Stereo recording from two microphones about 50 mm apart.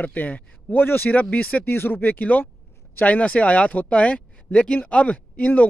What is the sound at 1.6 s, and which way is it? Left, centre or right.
Speech, left.